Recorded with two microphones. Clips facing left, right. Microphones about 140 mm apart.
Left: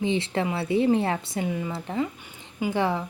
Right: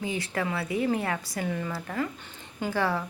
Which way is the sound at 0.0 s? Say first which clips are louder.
Left 5 dB; 25° left (ahead or behind).